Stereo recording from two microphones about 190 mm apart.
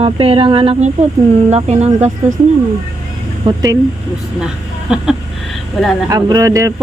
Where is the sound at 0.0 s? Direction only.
30° right (ahead or behind).